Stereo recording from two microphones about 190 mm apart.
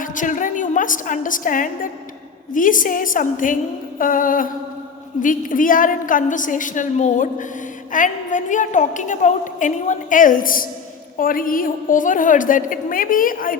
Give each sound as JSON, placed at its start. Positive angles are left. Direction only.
{"t": 0.0, "sound": "a woman's voice", "side_deg": 45}